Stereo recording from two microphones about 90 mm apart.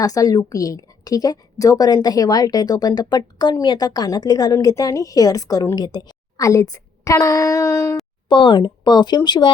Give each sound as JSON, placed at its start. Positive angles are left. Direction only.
{"t": 0.0, "sound": "a woman's voice", "side_deg": 40}
{"t": 5.7, "sound": "a woman's voice", "side_deg": 50}
{"t": 8.3, "sound": "speech", "side_deg": 60}